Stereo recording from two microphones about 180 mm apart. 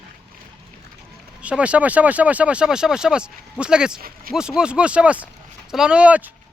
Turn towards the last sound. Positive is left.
turn(degrees=-5)  # may be behind; listen again after turning